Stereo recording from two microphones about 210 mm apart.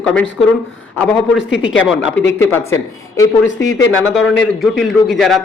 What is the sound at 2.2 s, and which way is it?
Speech, 10° left (ahead or behind).